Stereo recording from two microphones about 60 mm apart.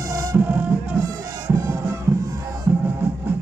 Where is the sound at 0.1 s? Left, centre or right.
Right.